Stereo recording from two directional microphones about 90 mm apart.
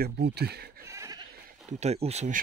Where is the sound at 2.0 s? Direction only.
90° right.